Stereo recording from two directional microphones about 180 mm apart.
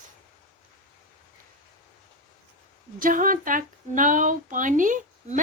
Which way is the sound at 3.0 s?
50° right (ahead or behind).